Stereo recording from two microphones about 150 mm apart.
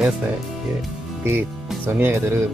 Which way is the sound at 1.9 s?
20° right (ahead or behind).